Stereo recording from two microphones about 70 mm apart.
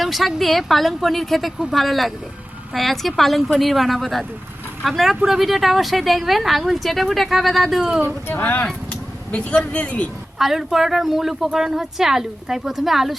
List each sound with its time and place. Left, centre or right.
0.0 s speech: centre
8.0 s speech: left
10.3 s speech: centre